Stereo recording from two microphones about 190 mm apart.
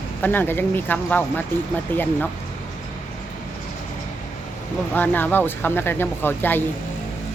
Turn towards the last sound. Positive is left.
turn(degrees=10)  # may be behind; listen again after turning